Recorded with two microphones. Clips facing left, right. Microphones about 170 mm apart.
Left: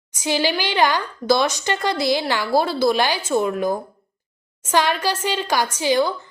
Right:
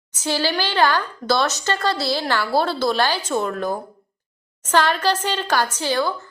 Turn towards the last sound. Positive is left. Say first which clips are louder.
# left 3 dB
turn(degrees=15)  # may be behind; listen again after turning